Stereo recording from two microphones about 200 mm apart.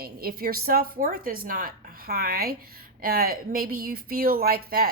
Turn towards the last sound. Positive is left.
turn(degrees=-50)  # may be behind; listen again after turning